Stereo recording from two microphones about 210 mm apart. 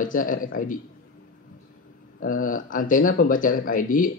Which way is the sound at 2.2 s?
40° left (ahead or behind).